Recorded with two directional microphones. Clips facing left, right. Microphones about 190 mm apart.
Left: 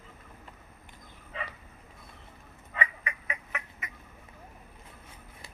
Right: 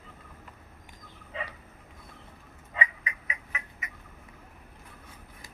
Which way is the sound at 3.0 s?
55° left (ahead or behind).